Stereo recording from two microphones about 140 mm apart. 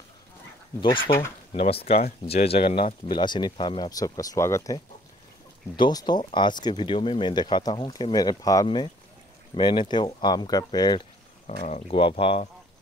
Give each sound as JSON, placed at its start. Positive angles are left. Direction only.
{"t": 0.7, "sound": "speech", "side_deg": 35}
{"t": 5.8, "sound": "speech", "side_deg": 30}
{"t": 8.6, "sound": "speech", "side_deg": 40}
{"t": 11.4, "sound": "speech", "side_deg": 55}
{"t": 11.9, "sound": "speech", "side_deg": 40}